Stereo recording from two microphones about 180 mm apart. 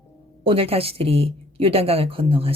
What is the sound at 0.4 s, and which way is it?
A woman's voice, 30° right (ahead or behind).